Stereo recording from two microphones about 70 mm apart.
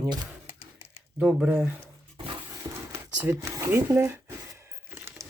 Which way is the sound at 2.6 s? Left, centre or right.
Right.